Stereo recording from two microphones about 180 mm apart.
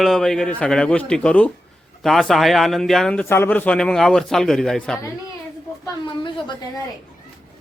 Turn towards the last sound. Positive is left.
turn(degrees=25)  # may be behind; listen again after turning